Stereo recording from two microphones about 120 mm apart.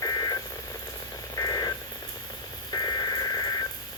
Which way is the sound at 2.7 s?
35° left (ahead or behind).